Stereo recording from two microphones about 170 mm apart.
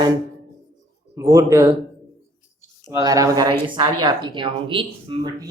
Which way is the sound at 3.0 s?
20° right (ahead or behind).